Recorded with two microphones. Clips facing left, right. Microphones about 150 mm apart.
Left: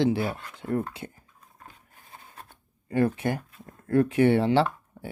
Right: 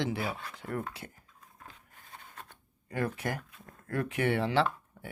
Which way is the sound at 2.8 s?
25° left (ahead or behind).